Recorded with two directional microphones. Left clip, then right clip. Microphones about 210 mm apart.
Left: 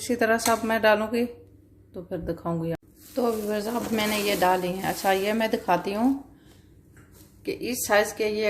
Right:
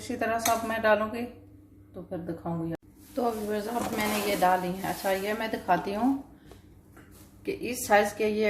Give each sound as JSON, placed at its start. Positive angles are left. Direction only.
{"t": 0.1, "sound": "speech", "side_deg": 45}
{"t": 3.2, "sound": "speech", "side_deg": 25}
{"t": 7.4, "sound": "a woman's voice", "side_deg": 20}